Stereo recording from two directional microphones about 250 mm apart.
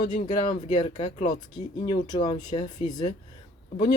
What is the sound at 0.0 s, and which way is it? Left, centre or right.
Speech, centre.